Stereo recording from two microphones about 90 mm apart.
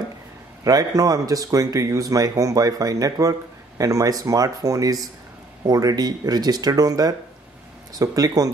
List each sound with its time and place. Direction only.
0.7 s speech: 40° right (ahead or behind)